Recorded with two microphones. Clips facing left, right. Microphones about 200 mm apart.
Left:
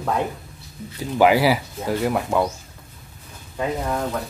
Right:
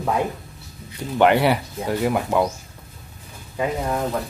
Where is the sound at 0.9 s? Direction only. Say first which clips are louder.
Even; 5° left (ahead or behind).